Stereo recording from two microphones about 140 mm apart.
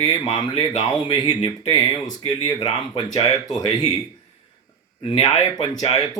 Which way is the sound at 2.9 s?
30° left (ahead or behind).